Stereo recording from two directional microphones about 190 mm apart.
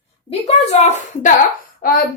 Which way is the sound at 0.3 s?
35° left (ahead or behind).